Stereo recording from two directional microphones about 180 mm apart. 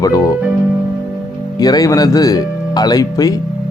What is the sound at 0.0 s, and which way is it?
Speech, 20° left (ahead or behind).